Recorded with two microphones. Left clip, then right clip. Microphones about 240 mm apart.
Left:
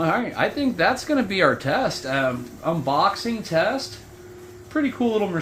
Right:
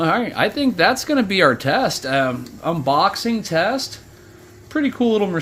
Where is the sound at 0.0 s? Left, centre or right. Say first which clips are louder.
Right 4 dB; right.